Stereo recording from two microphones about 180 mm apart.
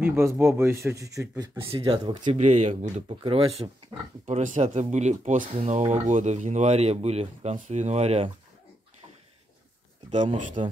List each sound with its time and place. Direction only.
0.0 s speech: 15° right (ahead or behind)
1.6 s speech: 25° right (ahead or behind)
2.2 s speech: 40° right (ahead or behind)
4.3 s speech: 40° right (ahead or behind)
10.1 s speech: 40° right (ahead or behind)